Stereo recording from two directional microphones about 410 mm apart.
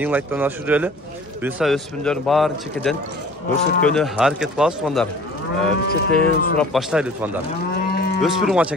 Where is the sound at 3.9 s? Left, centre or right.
Centre.